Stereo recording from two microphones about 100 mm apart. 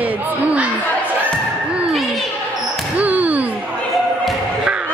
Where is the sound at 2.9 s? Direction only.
15° right (ahead or behind).